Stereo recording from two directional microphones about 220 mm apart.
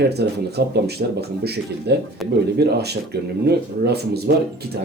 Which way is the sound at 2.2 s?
Centre (ahead or behind).